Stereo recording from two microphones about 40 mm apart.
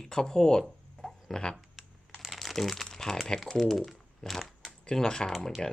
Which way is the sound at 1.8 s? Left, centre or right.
Centre.